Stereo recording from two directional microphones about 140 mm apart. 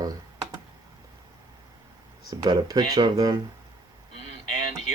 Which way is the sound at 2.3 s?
30° right (ahead or behind).